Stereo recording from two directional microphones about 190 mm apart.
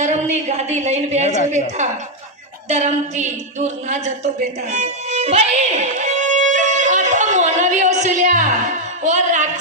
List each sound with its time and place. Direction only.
0.0 s a woman's voice: 35° right (ahead or behind)
4.7 s music: 35° right (ahead or behind)